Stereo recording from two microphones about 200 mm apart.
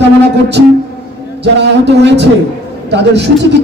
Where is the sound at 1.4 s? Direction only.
60° right (ahead or behind).